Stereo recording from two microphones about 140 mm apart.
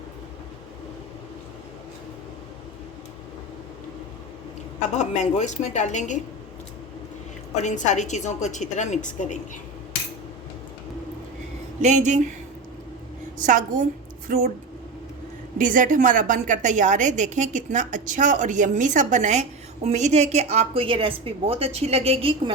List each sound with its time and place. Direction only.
4.9 s a woman's voice: 55° left (ahead or behind)
7.5 s a woman's voice: 55° left (ahead or behind)
11.8 s a woman's voice: 60° right (ahead or behind)
13.4 s a woman's voice: 70° right (ahead or behind)
15.5 s a woman's voice: 70° right (ahead or behind); by 22.5 s 40° right (ahead or behind)